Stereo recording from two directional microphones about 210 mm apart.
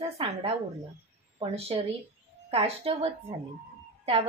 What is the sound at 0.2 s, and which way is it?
Speech, 30° right (ahead or behind).